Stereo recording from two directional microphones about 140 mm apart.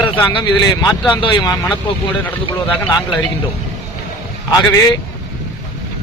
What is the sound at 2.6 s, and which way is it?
Speech, 10° left (ahead or behind).